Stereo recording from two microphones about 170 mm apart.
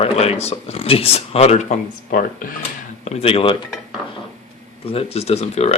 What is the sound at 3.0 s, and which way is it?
Speech, 35° left (ahead or behind).